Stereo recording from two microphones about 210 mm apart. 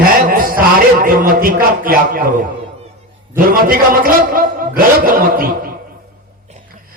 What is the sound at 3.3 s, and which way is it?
Speech, 40° right (ahead or behind).